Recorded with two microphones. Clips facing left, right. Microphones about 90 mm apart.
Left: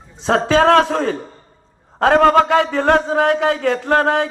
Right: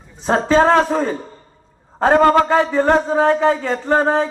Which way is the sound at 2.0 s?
75° left (ahead or behind).